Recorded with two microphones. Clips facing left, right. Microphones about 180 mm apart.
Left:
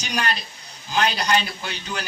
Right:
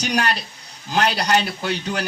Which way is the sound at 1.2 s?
40° right (ahead or behind).